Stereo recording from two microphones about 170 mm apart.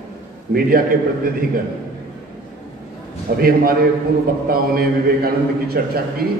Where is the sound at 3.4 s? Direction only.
60° right (ahead or behind).